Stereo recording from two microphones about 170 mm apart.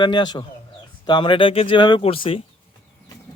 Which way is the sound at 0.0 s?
25° left (ahead or behind).